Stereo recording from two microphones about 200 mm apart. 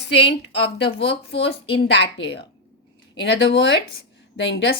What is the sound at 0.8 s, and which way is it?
Speech, 60° left (ahead or behind).